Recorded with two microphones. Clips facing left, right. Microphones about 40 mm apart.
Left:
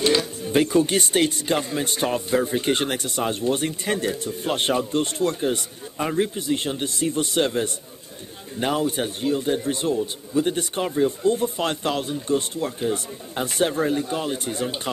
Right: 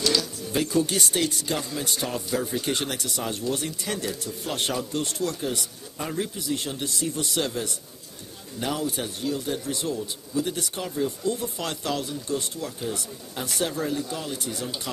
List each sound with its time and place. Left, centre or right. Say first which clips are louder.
0.0 s speech: left 5 dB; left